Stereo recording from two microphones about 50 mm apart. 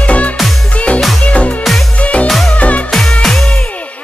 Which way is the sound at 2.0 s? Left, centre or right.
Left.